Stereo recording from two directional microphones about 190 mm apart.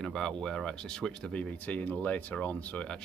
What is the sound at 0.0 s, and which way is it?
Speech, centre (ahead or behind).